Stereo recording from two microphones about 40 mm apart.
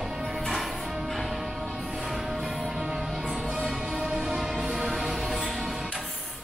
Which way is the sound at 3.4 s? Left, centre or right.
Centre.